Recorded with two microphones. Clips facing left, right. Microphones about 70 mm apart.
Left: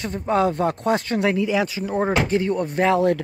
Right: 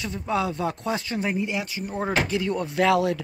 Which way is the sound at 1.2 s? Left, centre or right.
Left.